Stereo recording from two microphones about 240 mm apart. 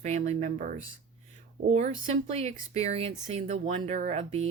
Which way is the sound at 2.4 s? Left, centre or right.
Right.